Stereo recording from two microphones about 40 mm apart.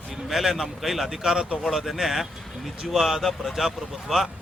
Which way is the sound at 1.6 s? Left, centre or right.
Centre.